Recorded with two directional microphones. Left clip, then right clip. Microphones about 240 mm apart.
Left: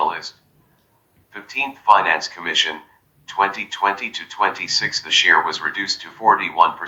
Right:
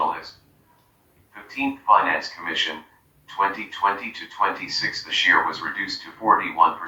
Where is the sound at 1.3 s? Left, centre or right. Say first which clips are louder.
Left 3 dB; left.